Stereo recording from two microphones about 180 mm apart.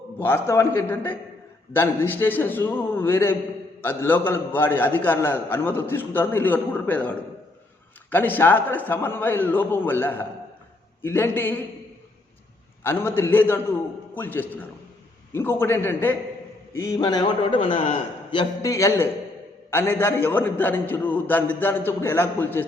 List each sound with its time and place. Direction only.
0.2 s a man's voice: 10° left (ahead or behind)
12.8 s a man's voice: 10° left (ahead or behind)